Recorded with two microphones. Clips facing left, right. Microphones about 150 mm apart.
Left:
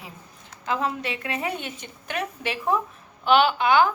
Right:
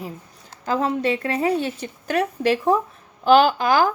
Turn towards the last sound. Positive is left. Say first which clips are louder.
# right 1 dB
turn(degrees=-40)  # may be behind; listen again after turning